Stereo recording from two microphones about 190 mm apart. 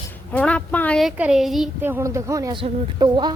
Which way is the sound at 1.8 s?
15° right (ahead or behind).